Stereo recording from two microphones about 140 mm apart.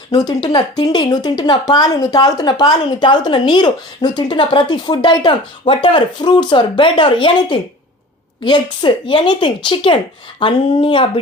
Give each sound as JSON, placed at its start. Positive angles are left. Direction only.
{"t": 0.4, "sound": "speech", "side_deg": 30}